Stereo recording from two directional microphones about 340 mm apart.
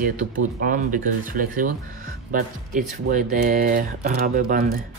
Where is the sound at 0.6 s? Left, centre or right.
Right.